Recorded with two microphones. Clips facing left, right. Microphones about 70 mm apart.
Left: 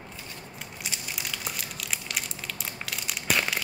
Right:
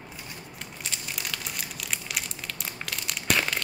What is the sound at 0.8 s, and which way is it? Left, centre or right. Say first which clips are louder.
Crumpling: even; centre.